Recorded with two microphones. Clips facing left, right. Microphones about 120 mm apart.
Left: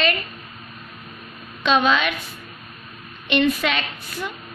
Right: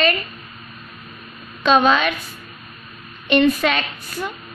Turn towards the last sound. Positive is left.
turn(degrees=-40)  # may be behind; listen again after turning